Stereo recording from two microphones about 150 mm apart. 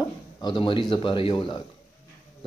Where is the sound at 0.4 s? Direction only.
30° left (ahead or behind).